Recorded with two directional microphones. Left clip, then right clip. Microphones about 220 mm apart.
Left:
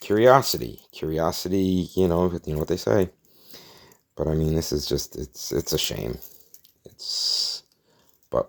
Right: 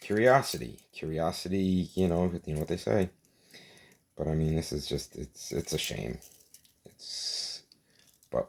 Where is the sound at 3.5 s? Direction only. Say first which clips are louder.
Left 6 dB; 35° left (ahead or behind).